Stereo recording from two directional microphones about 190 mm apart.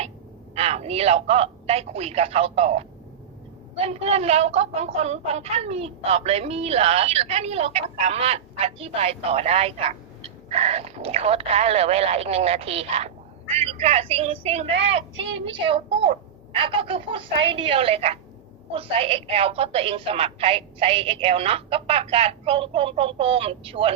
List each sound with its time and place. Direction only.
0.5 s a woman's voice: 35° right (ahead or behind)
15.1 s speech: 80° right
15.4 s a woman's voice: 30° right (ahead or behind)